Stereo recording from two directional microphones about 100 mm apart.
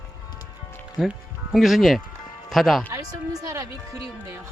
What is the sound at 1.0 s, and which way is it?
Speech, centre (ahead or behind).